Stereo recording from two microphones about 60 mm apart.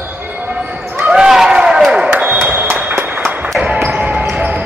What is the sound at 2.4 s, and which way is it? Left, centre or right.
Applause, right.